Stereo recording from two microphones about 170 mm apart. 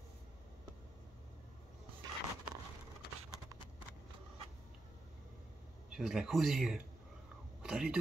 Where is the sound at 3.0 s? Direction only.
70° left (ahead or behind).